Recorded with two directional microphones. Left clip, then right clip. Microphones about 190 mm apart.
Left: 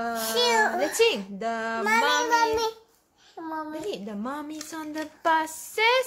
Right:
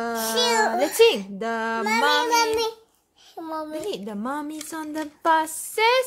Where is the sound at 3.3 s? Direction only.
35° right (ahead or behind).